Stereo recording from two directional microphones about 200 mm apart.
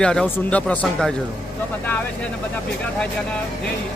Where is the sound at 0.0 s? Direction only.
5° left (ahead or behind).